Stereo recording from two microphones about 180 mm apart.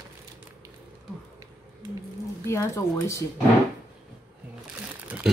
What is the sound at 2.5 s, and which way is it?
Speech, 15° left (ahead or behind).